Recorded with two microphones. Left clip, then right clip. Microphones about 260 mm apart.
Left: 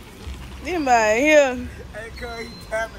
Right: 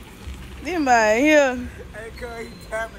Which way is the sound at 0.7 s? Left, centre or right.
Right.